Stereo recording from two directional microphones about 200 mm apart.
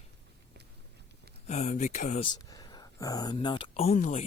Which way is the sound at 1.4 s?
35° left (ahead or behind).